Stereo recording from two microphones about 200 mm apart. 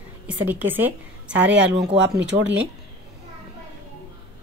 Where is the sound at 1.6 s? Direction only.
60° right (ahead or behind).